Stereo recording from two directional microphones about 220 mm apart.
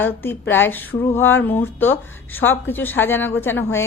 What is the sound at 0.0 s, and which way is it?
Speech, 10° left (ahead or behind).